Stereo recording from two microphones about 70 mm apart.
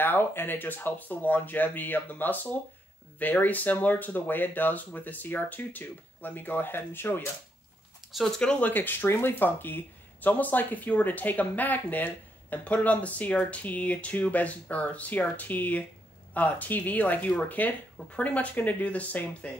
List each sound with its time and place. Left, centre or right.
0.0 s speech: left
8.4 s speech: centre
8.6 s speech: left